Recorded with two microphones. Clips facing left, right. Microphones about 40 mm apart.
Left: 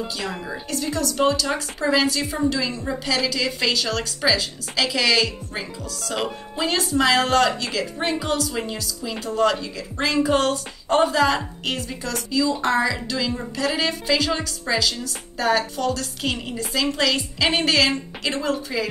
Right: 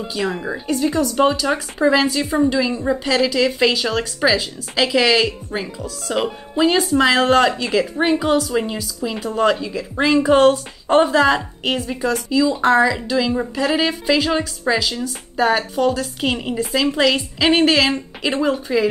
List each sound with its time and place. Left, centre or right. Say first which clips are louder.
0.1 s speech: right 6 dB; centre